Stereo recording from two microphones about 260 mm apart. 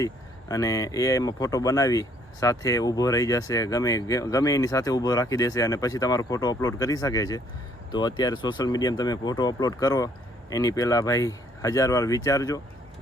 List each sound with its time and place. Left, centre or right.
0.0 s speech: centre